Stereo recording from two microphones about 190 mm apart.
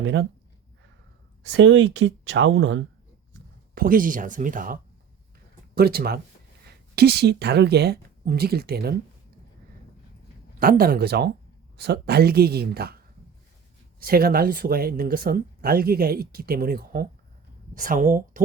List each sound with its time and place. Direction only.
0.0 s speech: 80° right
1.5 s speech: 75° right (ahead or behind)
3.8 s speech: 45° right (ahead or behind)
10.6 s speech: 50° right (ahead or behind)
14.0 s speech: 50° right (ahead or behind)